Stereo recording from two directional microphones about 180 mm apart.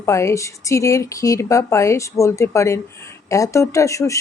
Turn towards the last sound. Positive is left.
turn(degrees=15)  # may be behind; listen again after turning